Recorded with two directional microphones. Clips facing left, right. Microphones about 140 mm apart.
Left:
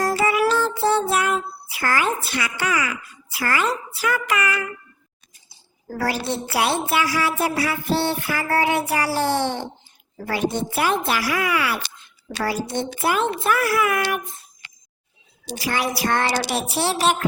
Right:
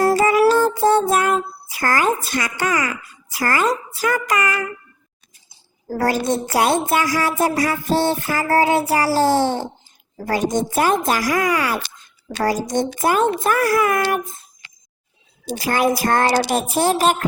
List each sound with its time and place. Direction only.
0.1 s child singing: 40° right (ahead or behind)
5.9 s a woman's voice: 45° right (ahead or behind)
15.4 s a woman's voice: 45° right (ahead or behind)